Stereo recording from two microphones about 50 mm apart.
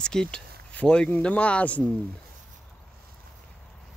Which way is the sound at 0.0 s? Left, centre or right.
Centre.